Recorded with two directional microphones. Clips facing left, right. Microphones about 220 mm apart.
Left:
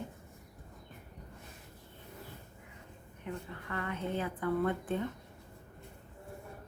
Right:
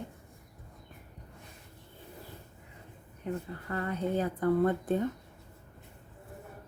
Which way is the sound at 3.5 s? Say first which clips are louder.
Right 4 dB; 35° right (ahead or behind).